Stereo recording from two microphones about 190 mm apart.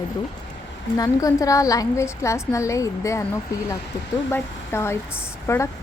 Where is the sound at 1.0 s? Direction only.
20° left (ahead or behind).